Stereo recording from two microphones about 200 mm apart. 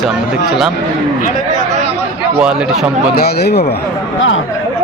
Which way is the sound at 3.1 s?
55° left (ahead or behind).